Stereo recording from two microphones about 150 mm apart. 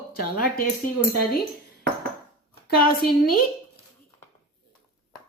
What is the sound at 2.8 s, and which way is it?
Speech, 80° left.